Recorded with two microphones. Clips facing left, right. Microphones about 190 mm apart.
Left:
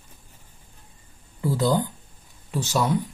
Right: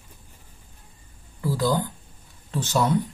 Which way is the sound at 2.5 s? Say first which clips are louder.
Right 1 dB; 10° left (ahead or behind).